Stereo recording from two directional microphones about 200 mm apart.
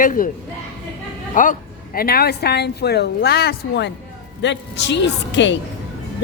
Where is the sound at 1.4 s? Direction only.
45° left (ahead or behind).